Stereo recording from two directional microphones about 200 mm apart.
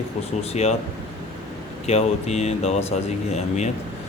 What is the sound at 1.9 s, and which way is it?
Speech, 35° left (ahead or behind).